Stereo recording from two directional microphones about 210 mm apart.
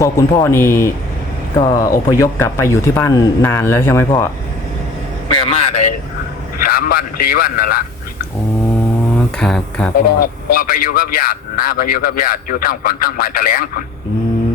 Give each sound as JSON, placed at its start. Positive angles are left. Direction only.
{"t": 0.0, "sound": "speech", "side_deg": 15}
{"t": 5.3, "sound": "a sound", "side_deg": 25}
{"t": 6.6, "sound": "a man's voice", "side_deg": 45}
{"t": 9.1, "sound": "speech", "side_deg": 5}
{"t": 10.2, "sound": "a man's voice", "side_deg": 45}